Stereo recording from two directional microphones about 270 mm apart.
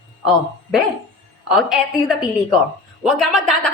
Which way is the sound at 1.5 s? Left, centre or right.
Centre.